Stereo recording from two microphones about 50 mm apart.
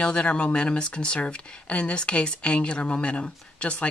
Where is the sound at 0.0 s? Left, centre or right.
Left.